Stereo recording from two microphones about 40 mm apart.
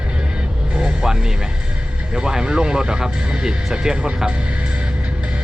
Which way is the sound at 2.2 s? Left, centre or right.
Centre.